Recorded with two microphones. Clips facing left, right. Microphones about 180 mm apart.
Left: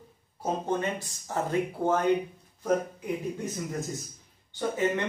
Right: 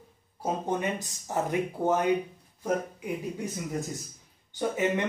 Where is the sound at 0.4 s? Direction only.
15° right (ahead or behind).